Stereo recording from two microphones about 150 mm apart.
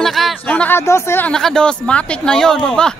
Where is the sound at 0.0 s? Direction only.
Centre (ahead or behind); by 1.3 s 15° left (ahead or behind).